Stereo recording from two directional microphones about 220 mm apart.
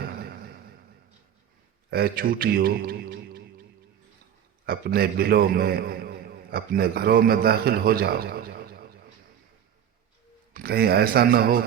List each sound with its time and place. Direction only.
0.0 s a sound: 45° right (ahead or behind)
1.9 s a man's voice: 45° right (ahead or behind)
4.6 s a man's voice: 45° right (ahead or behind)
10.5 s a man's voice: 45° right (ahead or behind)